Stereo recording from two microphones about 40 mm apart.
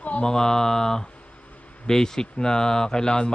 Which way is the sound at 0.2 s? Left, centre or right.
Centre.